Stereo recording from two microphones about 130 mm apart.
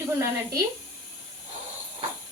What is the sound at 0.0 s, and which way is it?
Speech, 20° right (ahead or behind).